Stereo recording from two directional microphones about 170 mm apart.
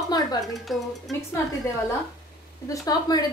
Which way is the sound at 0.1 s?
20° left (ahead or behind).